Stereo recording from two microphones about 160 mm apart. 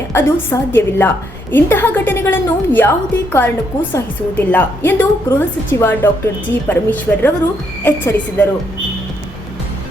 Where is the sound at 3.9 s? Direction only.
10° left (ahead or behind).